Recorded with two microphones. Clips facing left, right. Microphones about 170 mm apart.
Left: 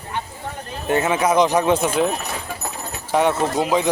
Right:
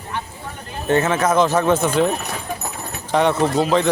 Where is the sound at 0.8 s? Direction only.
15° left (ahead or behind).